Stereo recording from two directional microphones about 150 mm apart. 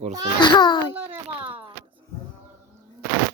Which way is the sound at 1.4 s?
35° right (ahead or behind).